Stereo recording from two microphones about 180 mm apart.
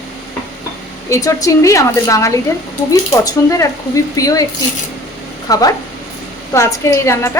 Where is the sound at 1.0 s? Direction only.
15° left (ahead or behind).